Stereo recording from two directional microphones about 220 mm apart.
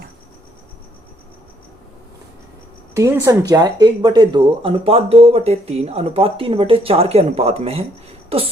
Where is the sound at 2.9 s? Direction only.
15° right (ahead or behind).